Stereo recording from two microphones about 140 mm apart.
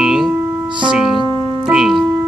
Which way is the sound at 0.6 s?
35° right (ahead or behind).